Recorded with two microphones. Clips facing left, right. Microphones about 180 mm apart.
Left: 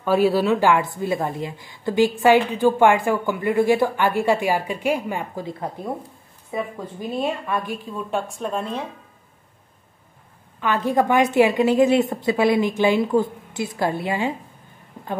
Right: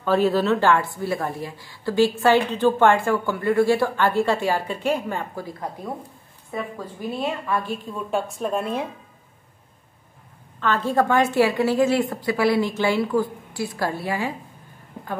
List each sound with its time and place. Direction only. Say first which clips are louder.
0.0 s a woman's voice: left 1 dB; 10° left (ahead or behind)
7.2 s a woman's voice: left 2 dB; 20° left (ahead or behind)
8.1 s speech: right 2 dB; centre (ahead or behind)
10.6 s a woman's voice: left 1 dB; 15° left (ahead or behind)